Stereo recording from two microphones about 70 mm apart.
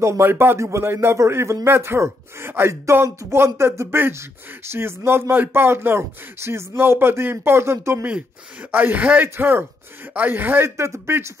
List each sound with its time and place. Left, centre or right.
0.0 s a man's voice: right
8.7 s speech: right
10.8 s a man's voice: right